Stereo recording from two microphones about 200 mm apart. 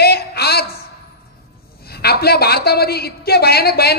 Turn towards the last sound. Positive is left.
turn(degrees=50)  # may be behind; listen again after turning